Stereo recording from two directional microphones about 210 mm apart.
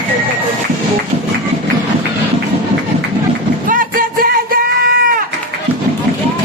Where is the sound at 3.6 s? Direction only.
40° right (ahead or behind).